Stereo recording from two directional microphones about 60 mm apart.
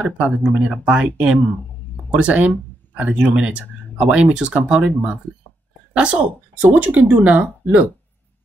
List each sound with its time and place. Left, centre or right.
0.0 s speech: right